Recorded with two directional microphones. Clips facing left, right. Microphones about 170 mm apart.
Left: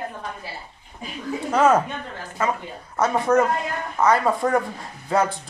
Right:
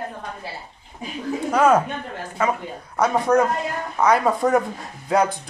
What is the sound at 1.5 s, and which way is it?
Speech, 10° right (ahead or behind).